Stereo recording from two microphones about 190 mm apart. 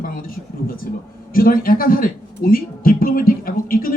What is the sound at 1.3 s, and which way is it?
A man's voice, 50° left (ahead or behind).